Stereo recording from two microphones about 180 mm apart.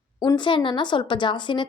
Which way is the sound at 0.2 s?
25° left (ahead or behind).